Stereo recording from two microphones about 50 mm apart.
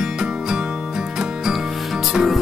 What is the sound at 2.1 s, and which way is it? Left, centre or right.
Music, centre.